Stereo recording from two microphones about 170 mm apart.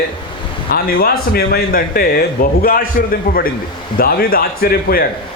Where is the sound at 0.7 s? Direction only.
60° left (ahead or behind).